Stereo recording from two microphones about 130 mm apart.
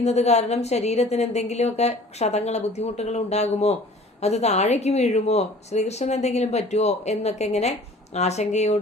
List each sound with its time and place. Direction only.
0.0 s a woman's voice: 55° left (ahead or behind)